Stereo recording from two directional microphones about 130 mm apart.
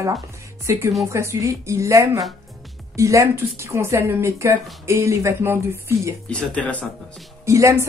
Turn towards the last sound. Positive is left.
turn(degrees=-25)  # may be behind; listen again after turning